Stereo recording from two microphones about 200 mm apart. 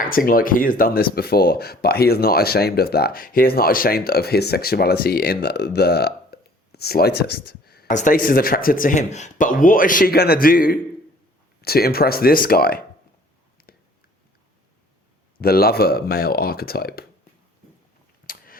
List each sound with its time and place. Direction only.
0.0 s speech: 45° left (ahead or behind)
13.6 s a sound: 50° left (ahead or behind)
15.4 s speech: 50° left (ahead or behind)